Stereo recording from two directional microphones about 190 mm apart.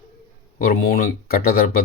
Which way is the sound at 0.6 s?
50° left (ahead or behind).